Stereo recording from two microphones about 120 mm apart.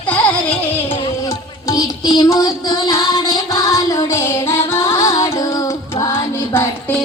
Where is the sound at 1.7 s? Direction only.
30° left (ahead or behind).